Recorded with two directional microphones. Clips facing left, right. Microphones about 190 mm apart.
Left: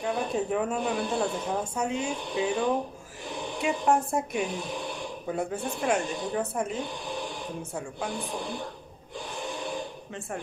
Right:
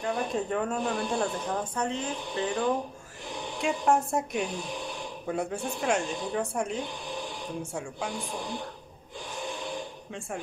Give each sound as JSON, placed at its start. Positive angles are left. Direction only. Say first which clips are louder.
{"t": 0.0, "sound": "speech", "louder": "left 1 dB", "side_deg": 5}
{"t": 3.6, "sound": "speech", "louder": "even", "side_deg": 0}